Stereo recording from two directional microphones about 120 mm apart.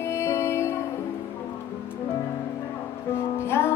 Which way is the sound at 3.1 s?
20° left (ahead or behind).